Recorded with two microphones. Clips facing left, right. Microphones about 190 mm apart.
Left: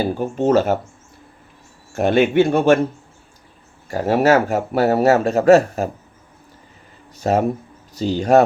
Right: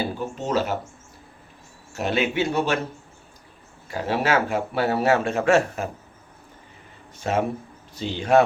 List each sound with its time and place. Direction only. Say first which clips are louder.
0.0 s speech: left 9 dB; 50° left (ahead or behind)
1.9 s speech: left 8 dB; 50° left (ahead or behind)
3.8 s speech: left 8 dB; 45° left (ahead or behind)
7.2 s speech: left 6 dB; 40° left (ahead or behind)